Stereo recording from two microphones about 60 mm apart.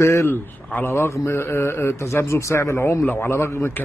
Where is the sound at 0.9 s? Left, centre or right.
Left.